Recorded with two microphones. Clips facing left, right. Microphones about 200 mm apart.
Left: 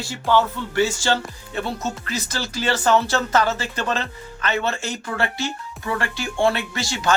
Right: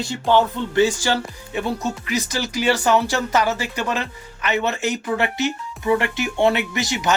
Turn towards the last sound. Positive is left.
turn(degrees=-20)  # may be behind; listen again after turning